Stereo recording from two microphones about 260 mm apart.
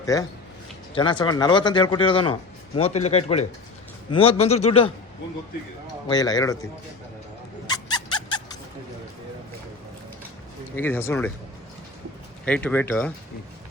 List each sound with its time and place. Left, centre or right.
0.0 s a man's voice: centre
6.1 s speech: centre
7.7 s a sound: centre
10.8 s speech: centre
12.5 s speech: centre